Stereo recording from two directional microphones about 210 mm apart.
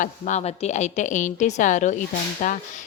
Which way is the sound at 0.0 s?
35° left (ahead or behind).